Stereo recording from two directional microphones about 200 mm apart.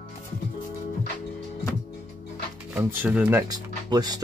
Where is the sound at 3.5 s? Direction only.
20° right (ahead or behind).